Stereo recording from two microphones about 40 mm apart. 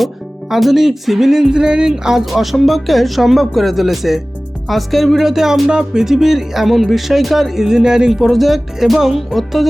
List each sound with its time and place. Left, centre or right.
0.5 s speech: centre
1.5 s speech: right
2.3 s speech: centre